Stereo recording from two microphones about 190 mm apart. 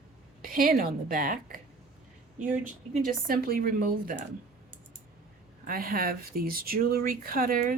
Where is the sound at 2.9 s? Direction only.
50° right (ahead or behind).